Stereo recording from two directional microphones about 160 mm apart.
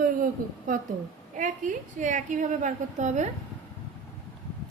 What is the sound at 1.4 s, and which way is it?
A woman's voice, 50° right (ahead or behind).